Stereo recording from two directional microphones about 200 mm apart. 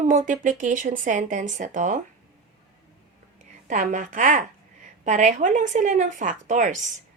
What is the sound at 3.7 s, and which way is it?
A woman's voice, 40° right (ahead or behind).